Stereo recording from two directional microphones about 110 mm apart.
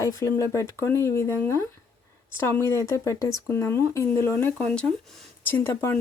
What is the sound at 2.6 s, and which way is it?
Speech, 25° left (ahead or behind).